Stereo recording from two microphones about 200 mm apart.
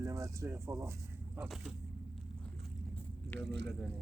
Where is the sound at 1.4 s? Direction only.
Centre (ahead or behind).